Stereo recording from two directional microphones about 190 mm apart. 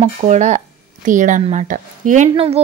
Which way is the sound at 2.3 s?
30° right (ahead or behind).